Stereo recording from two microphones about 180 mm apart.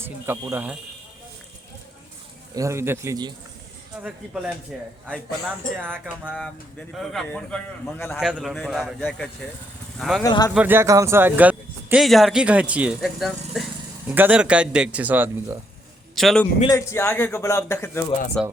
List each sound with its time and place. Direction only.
0.0 s speech: 15° right (ahead or behind)
2.6 s speech: 15° right (ahead or behind)
4.7 s a man's voice: 5° right (ahead or behind)
6.9 s a man's voice: centre (ahead or behind)
8.2 s a man's voice: 5° right (ahead or behind)
10.2 s speech: 20° left (ahead or behind)
10.5 s speech: 10° right (ahead or behind)
16.1 s a man's voice: centre (ahead or behind)
16.6 s a man's voice: 15° left (ahead or behind)